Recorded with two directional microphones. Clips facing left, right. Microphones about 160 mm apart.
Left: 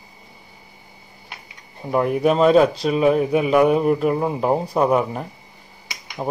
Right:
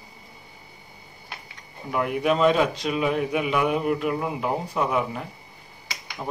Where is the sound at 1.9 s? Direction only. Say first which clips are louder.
Left 5 dB; 40° left (ahead or behind).